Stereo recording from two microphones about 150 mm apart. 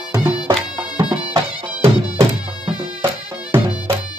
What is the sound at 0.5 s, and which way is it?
Music, 35° right (ahead or behind).